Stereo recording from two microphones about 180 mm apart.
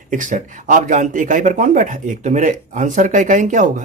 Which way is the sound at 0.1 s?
45° right (ahead or behind).